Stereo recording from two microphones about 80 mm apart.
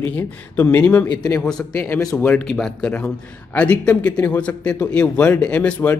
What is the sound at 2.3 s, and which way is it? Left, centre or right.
Speech, centre.